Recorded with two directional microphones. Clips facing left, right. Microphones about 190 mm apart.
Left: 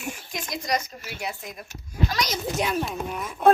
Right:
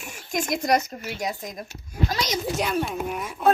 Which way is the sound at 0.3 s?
50° right (ahead or behind).